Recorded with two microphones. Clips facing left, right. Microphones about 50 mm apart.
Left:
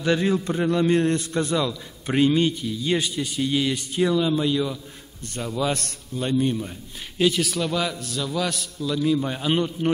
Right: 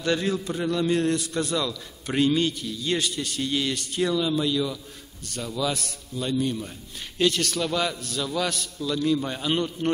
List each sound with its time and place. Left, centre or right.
0.0 s a man's voice: centre
5.7 s a man's voice: left
6.1 s a man's voice: left
7.2 s a man's voice: centre